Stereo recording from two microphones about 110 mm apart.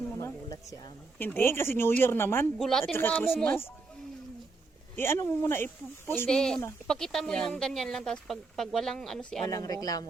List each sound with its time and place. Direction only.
0.4 s speech: 35° left (ahead or behind)
1.2 s speech: 20° left (ahead or behind)
2.6 s speech: 5° left (ahead or behind)
2.9 s speech: 20° left (ahead or behind)
4.9 s speech: 25° left (ahead or behind)
6.2 s speech: 5° left (ahead or behind)
9.5 s speech: 35° left (ahead or behind)